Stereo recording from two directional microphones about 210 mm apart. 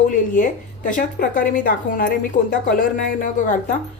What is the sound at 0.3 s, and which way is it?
A woman's voice, 40° left (ahead or behind).